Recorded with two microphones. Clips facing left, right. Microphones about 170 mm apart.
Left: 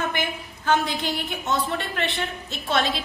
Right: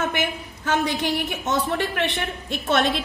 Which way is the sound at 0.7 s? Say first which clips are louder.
Even; 70° right (ahead or behind).